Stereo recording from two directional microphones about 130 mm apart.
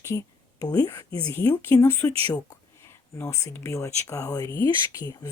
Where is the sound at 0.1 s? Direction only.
25° left (ahead or behind).